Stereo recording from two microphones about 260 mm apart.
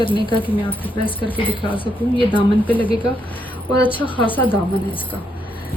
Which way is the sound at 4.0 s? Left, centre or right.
Centre.